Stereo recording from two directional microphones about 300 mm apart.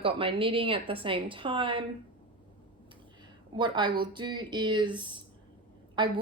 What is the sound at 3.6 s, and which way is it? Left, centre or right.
A woman's voice, centre.